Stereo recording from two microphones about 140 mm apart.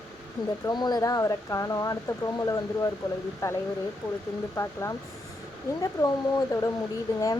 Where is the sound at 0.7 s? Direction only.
30° left (ahead or behind).